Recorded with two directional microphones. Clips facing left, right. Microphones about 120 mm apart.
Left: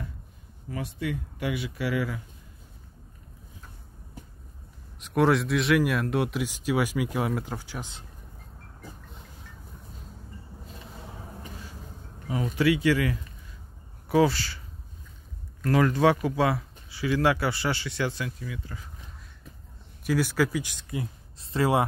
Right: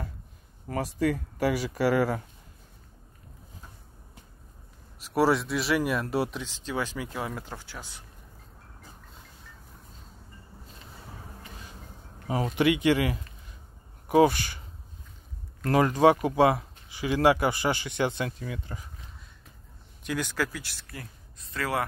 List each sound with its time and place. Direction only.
0.7 s speech: 45° right (ahead or behind)
5.0 s speech: 5° right (ahead or behind)
6.4 s speech: 10° left (ahead or behind)
12.3 s speech: 35° right (ahead or behind)
12.5 s speech: 20° right (ahead or behind)
15.8 s speech: 15° right (ahead or behind)
20.0 s speech: 10° left (ahead or behind)
21.4 s speech: 30° left (ahead or behind)